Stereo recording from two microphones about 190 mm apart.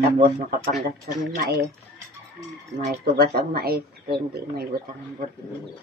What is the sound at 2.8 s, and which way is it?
Speech, 55° right (ahead or behind).